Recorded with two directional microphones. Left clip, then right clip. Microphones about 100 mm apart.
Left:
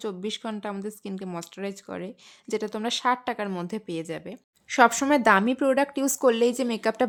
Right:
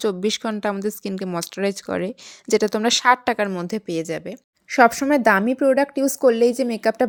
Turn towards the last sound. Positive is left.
turn(degrees=-35)  # may be behind; listen again after turning